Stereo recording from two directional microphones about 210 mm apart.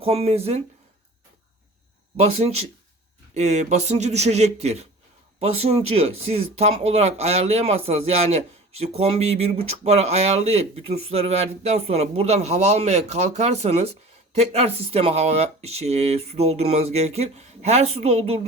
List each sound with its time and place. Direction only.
0.0 s speech: 30° right (ahead or behind)
3.3 s speech: 30° right (ahead or behind)